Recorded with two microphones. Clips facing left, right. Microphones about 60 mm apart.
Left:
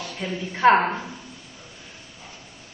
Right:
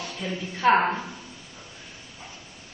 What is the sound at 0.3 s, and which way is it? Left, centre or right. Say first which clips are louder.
Speech: left 3 dB; left.